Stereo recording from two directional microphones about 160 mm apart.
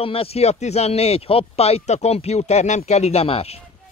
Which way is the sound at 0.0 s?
35° left (ahead or behind).